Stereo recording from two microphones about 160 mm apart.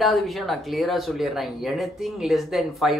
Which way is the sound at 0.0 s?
Centre (ahead or behind).